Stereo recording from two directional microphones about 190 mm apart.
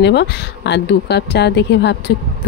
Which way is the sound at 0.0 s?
65° left (ahead or behind).